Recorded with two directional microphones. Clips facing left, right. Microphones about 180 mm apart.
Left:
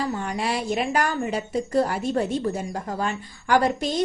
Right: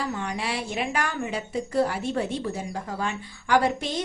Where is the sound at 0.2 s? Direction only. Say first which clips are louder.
Left 3 dB; 40° left (ahead or behind).